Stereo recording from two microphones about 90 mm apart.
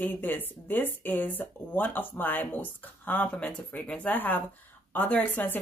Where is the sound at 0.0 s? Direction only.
20° left (ahead or behind).